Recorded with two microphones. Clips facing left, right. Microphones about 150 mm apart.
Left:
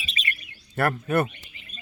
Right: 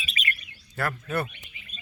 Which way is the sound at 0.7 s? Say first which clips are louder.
Left 6 dB; 55° left (ahead or behind).